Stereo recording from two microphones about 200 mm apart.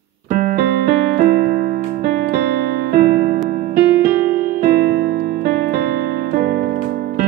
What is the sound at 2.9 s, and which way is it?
Keyboard, 45° right (ahead or behind).